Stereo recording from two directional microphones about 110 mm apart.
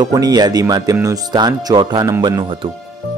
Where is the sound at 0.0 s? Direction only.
35° right (ahead or behind).